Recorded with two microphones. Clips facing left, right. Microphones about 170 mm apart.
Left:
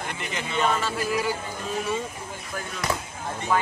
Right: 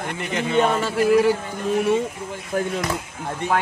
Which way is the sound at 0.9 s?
65° right (ahead or behind).